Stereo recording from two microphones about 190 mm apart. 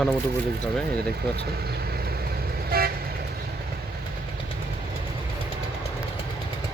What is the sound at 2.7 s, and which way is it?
Vehicle, 50° right (ahead or behind).